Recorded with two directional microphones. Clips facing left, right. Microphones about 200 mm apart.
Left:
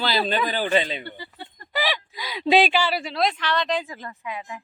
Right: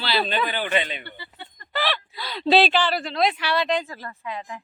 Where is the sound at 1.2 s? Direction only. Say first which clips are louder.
Left 3 dB; 40° left (ahead or behind).